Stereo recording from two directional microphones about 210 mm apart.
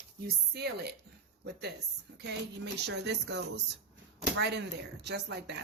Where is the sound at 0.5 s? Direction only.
50° right (ahead or behind).